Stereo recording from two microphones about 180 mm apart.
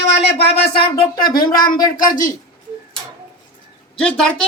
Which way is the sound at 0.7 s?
30° left (ahead or behind).